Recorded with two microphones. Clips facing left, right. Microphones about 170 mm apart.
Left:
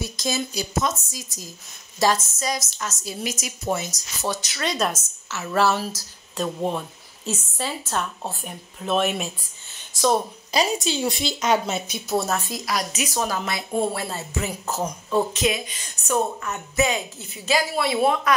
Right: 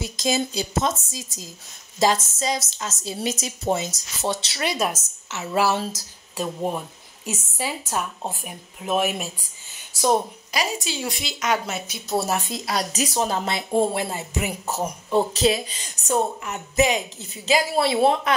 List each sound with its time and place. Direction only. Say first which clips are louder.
0.0 s speech: right 3 dB; 20° right (ahead or behind)
4.6 s speech: even; 5° right (ahead or behind)
5.3 s speech: left 1 dB; 20° right (ahead or behind)
10.5 s a woman's voice: left 4 dB; 25° left (ahead or behind)
12.3 s speech: even; 20° right (ahead or behind)
15.3 s a woman's voice: right 3 dB; 35° right (ahead or behind)
16.4 s speech: right 2 dB; 15° right (ahead or behind)